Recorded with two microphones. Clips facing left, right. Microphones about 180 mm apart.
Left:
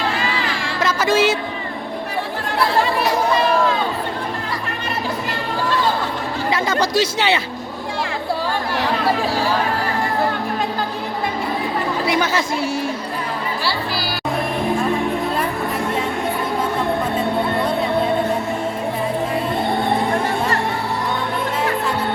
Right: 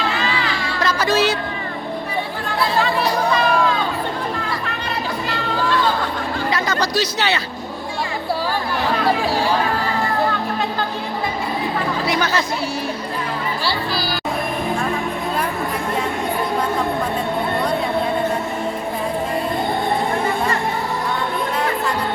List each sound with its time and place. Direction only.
0.8 s music: 20° left (ahead or behind)
6.5 s a sound: 25° left (ahead or behind)
13.7 s music: 5° left (ahead or behind)